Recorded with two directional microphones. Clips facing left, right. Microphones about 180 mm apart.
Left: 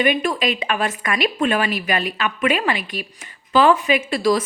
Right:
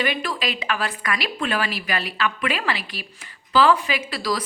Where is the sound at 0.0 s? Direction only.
20° left (ahead or behind).